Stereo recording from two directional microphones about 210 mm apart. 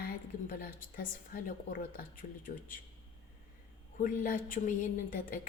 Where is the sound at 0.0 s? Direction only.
45° left (ahead or behind).